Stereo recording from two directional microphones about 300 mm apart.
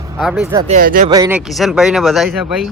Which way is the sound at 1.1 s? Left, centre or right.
Centre.